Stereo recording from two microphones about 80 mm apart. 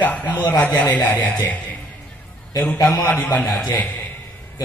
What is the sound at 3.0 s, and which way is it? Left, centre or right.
Speech, centre.